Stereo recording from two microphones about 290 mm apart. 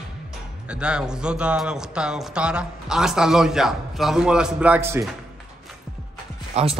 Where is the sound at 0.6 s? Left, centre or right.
Centre.